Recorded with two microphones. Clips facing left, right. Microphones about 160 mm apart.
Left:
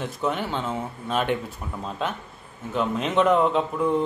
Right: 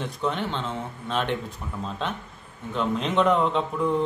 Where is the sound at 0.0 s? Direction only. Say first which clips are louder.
Left 1 dB; 5° left (ahead or behind).